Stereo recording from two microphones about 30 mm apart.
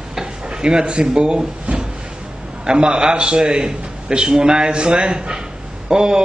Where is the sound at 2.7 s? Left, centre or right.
Right.